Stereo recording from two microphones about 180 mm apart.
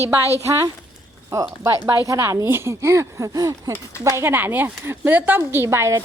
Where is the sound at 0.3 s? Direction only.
15° right (ahead or behind).